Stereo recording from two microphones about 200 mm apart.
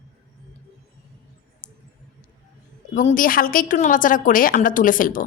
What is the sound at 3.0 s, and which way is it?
A woman's voice, 40° left (ahead or behind).